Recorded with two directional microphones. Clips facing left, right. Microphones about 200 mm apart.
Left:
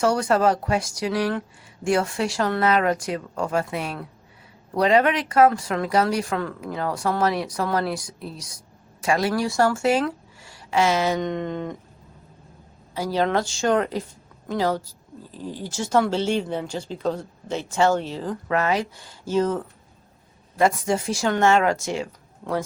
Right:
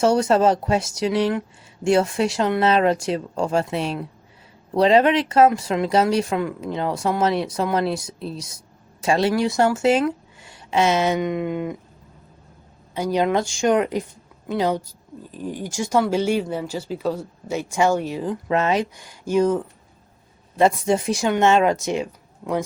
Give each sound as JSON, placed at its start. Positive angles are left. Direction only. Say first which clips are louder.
{"t": 0.0, "sound": "speech", "louder": "right 3 dB", "side_deg": -25}
{"t": 11.2, "sound": "speech", "louder": "right 3 dB", "side_deg": -10}
{"t": 12.9, "sound": "a woman's voice", "louder": "right 2 dB", "side_deg": -20}